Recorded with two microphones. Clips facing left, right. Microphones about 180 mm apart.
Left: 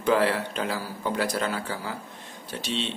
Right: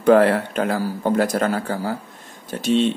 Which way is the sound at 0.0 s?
55° right (ahead or behind).